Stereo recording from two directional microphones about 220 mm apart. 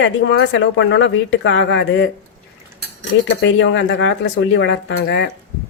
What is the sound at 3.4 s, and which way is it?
Speech, 55° left (ahead or behind).